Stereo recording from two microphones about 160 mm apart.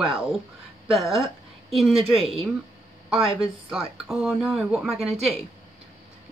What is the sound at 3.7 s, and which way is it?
Speech, centre (ahead or behind).